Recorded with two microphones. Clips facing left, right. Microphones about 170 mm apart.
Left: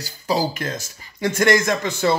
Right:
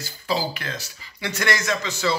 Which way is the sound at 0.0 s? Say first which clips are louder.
Left 4 dB; 45° left (ahead or behind).